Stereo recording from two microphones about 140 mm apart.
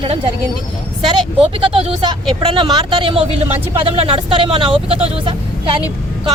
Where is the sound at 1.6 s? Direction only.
35° right (ahead or behind).